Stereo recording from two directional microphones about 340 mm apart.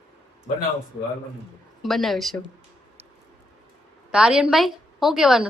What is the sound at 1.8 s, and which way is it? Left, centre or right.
Speech, centre.